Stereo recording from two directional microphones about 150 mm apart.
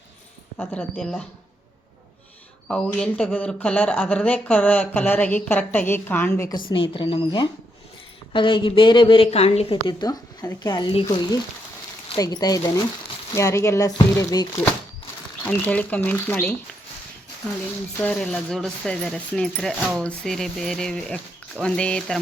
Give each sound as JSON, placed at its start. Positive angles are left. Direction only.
{"t": 0.6, "sound": "speech", "side_deg": 10}
{"t": 2.6, "sound": "speech", "side_deg": 5}
{"t": 6.7, "sound": "a woman's voice", "side_deg": 35}
{"t": 15.4, "sound": "speech", "side_deg": 10}
{"t": 18.0, "sound": "speech", "side_deg": 5}